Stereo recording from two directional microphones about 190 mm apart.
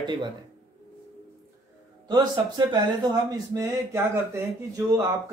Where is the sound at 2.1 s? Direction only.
20° right (ahead or behind).